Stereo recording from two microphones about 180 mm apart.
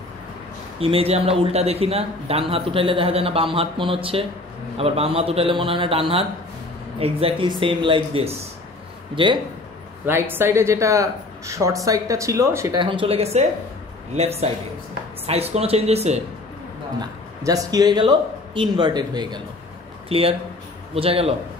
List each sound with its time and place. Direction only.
0.7 s a man's voice: 30° right (ahead or behind)
10.0 s speech: 10° right (ahead or behind)
12.8 s a man's voice: 30° right (ahead or behind)
17.0 s a man's voice: 20° right (ahead or behind)